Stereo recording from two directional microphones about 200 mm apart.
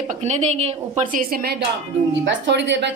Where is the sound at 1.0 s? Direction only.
45° right (ahead or behind).